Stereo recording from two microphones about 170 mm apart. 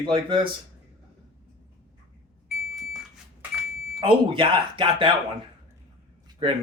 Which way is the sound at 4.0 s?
30° right (ahead or behind).